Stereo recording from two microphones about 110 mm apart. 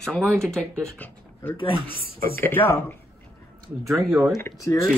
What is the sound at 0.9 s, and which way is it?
Speech, 15° left (ahead or behind).